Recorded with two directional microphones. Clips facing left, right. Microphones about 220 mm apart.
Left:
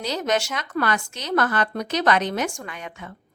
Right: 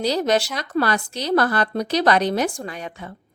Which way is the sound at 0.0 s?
35° right (ahead or behind).